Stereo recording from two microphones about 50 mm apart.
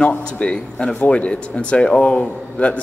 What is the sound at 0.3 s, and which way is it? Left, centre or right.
Speech, left.